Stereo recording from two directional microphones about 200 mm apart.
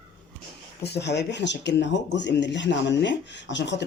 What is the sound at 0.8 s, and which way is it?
Speech, 55° left (ahead or behind).